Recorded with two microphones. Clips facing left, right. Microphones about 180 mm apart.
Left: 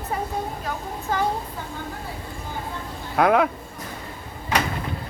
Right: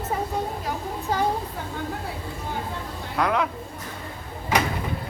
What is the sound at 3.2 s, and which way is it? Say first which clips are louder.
Speech: left 5 dB; 55° left (ahead or behind).